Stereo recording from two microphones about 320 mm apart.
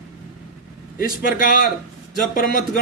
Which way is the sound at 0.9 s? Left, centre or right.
Left.